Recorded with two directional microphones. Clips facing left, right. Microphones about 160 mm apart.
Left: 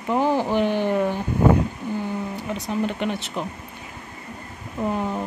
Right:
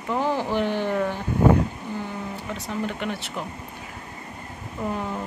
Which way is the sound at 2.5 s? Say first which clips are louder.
Left 4 dB; 20° left (ahead or behind).